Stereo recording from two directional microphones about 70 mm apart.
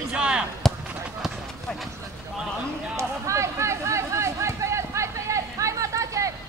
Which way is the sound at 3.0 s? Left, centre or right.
Right.